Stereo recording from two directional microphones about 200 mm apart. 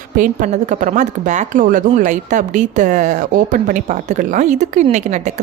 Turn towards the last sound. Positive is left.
turn(degrees=-35)  # may be behind; listen again after turning